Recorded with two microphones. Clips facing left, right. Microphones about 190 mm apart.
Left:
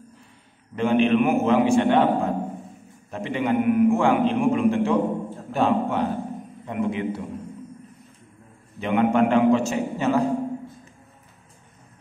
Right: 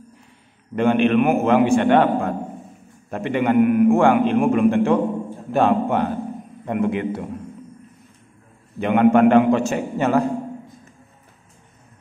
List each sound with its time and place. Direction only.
0.7 s a man's voice: 60° right (ahead or behind)
8.7 s a man's voice: 60° right (ahead or behind)